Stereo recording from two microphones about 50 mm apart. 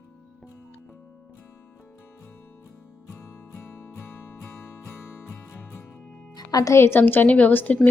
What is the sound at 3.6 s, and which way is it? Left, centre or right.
Music, left.